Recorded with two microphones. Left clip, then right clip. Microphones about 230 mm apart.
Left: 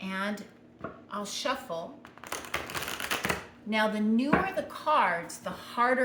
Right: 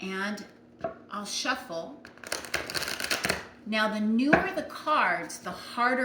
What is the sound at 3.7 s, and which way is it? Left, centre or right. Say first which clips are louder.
A woman's voice: even; centre.